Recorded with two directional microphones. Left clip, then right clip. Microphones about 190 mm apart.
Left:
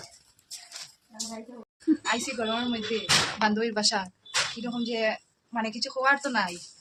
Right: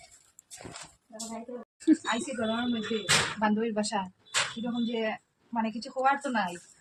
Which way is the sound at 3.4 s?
10° left (ahead or behind).